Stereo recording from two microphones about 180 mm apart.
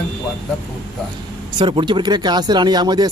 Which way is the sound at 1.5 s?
25° right (ahead or behind).